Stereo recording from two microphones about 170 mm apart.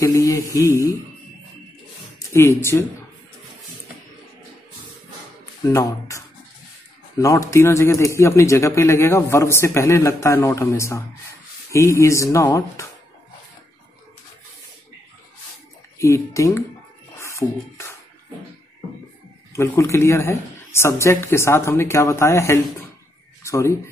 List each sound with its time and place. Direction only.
0.0 s speech: 20° left (ahead or behind)
2.1 s speech: 15° left (ahead or behind)
5.7 s speech: 20° left (ahead or behind)
16.0 s speech: 20° left (ahead or behind)
17.2 s music: 15° left (ahead or behind)
19.5 s speech: 15° left (ahead or behind)